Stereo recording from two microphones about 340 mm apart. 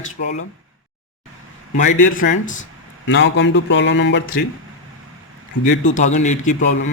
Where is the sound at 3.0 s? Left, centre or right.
Left.